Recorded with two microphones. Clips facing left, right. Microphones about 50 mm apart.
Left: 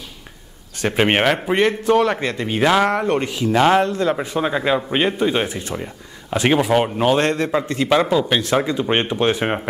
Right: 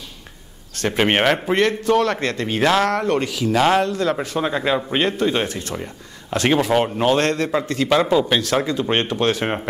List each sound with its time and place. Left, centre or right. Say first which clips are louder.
0.7 s speech: left 1 dB; centre
1.5 s speech: left 1 dB; centre
3.5 s speech: left 2 dB; centre
3.8 s a man's voice: left 1 dB; left
4.4 s a man's voice: left 2 dB; centre